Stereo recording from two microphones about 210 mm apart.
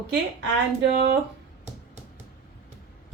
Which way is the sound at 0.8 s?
55° right (ahead or behind).